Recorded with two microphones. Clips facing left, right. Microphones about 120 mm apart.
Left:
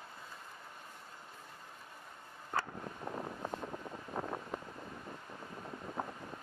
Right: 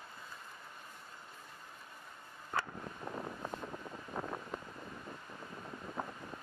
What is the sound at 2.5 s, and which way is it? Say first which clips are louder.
Wind: left 1 dB; 35° left (ahead or behind).